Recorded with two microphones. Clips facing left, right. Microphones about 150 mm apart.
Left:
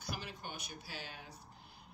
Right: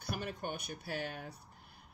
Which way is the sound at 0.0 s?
55° right (ahead or behind).